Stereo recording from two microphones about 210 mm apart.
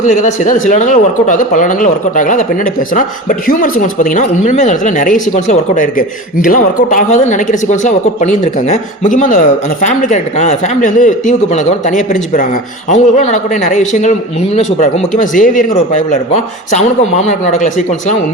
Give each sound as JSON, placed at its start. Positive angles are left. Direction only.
{"t": 0.0, "sound": "speech", "side_deg": 35}